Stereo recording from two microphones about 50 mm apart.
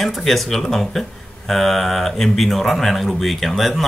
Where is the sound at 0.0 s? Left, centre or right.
Centre.